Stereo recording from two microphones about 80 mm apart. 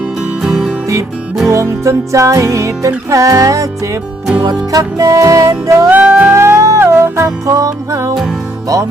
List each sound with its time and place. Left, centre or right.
0.4 s music: centre
1.5 s music: right
4.7 s music: right
5.9 s music: right
6.3 s music: right